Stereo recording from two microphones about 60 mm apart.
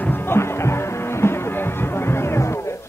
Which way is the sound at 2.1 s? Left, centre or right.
Left.